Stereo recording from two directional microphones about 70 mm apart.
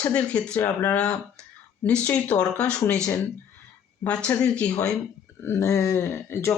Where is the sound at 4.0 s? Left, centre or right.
Centre.